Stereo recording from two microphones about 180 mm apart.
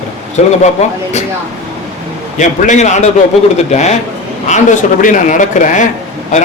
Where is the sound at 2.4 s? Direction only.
40° left (ahead or behind).